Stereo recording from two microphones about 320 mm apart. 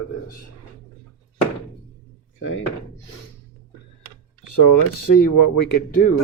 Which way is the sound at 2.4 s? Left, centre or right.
Left.